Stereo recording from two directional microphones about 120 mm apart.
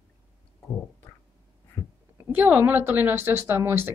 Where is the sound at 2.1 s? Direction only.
15° right (ahead or behind).